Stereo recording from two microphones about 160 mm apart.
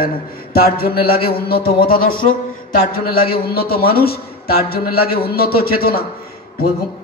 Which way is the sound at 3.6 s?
70° left (ahead or behind).